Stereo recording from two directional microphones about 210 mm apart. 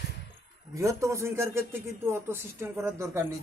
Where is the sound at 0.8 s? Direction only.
15° right (ahead or behind).